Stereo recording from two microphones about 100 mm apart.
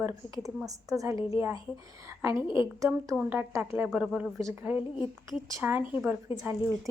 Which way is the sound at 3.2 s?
20° right (ahead or behind).